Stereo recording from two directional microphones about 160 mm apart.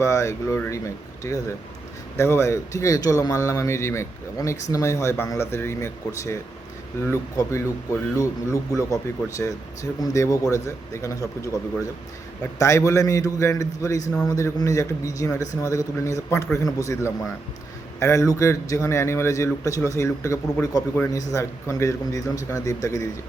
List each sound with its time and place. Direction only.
0.0 s speech: 20° left (ahead or behind)